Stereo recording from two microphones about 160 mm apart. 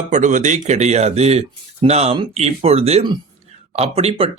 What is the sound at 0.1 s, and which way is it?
Speech, 50° right (ahead or behind).